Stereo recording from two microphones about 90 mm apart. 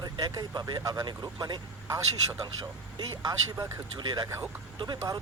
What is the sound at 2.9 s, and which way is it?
Speech, 55° right (ahead or behind).